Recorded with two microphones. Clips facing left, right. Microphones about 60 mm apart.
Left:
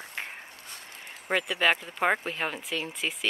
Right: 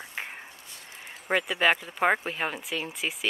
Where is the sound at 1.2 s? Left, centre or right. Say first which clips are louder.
Right 1 dB; centre.